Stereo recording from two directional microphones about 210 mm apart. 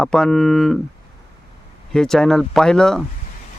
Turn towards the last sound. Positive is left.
turn(degrees=5)  # may be behind; listen again after turning